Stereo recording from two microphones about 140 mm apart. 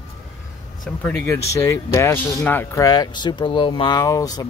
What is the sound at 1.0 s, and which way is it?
Speech, 20° left (ahead or behind).